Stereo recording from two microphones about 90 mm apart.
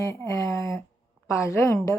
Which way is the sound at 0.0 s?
30° left (ahead or behind).